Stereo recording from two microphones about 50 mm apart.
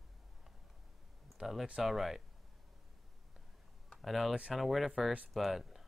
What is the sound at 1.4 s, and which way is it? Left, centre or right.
Speech, right.